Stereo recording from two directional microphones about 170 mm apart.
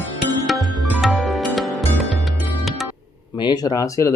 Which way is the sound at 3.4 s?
25° left (ahead or behind).